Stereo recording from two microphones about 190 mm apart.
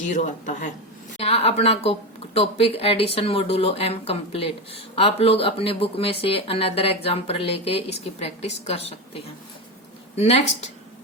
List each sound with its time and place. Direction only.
0.1 s speech: 40° left (ahead or behind)